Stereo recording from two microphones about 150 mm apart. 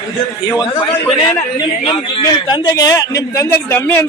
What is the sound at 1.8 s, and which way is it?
A man's voice, 35° left (ahead or behind).